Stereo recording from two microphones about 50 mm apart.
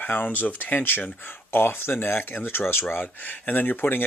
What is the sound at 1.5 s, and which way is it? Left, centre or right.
Speech, left.